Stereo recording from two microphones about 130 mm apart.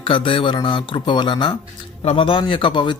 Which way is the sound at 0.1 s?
40° left (ahead or behind).